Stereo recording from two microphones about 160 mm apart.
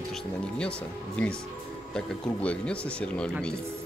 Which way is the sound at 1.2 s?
5° left (ahead or behind).